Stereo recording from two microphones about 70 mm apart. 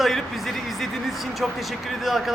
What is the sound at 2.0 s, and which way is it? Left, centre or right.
Speech, centre.